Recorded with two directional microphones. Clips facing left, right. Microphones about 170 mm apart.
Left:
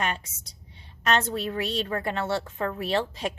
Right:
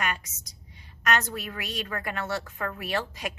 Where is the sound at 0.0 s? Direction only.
30° left (ahead or behind).